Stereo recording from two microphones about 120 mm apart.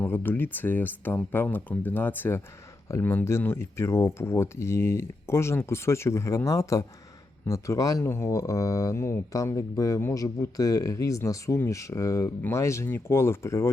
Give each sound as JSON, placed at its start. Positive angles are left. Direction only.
{"t": 0.0, "sound": "speech", "side_deg": 20}